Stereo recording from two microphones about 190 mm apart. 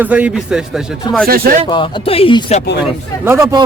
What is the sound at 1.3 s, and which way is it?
Speech, 50° right (ahead or behind).